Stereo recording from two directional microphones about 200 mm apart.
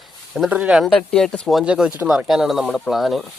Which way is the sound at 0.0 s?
Centre (ahead or behind).